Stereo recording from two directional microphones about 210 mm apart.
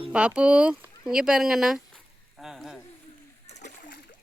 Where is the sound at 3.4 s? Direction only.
35° left (ahead or behind).